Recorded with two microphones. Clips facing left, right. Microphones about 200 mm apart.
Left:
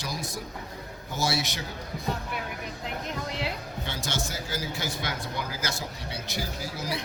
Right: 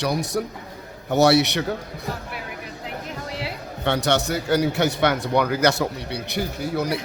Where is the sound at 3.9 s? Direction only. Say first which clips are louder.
Right 14 dB; 65° right (ahead or behind).